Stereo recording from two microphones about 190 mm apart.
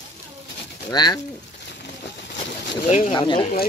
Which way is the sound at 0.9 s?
20° left (ahead or behind).